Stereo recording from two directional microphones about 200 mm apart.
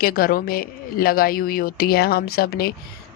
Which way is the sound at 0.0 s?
50° left (ahead or behind).